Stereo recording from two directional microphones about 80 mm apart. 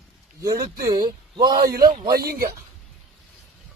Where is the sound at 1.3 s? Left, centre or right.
Right.